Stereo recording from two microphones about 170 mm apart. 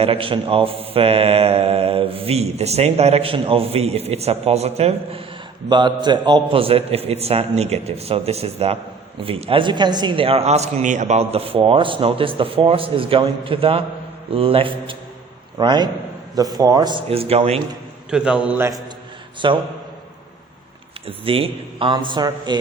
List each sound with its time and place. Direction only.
0.0 s speech: 35° right (ahead or behind)
5.6 s a man's voice: 25° right (ahead or behind)
18.1 s a man's voice: 5° right (ahead or behind)
19.4 s a man's voice: 25° right (ahead or behind)
21.1 s a man's voice: 35° right (ahead or behind)